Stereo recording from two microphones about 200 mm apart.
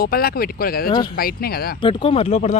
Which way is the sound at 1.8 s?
25° left (ahead or behind).